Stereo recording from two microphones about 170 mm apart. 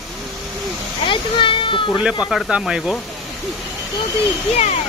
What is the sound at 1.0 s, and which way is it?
Speech, 30° left (ahead or behind).